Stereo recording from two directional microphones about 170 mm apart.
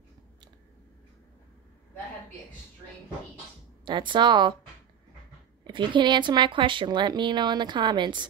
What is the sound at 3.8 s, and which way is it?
Speech, 30° right (ahead or behind).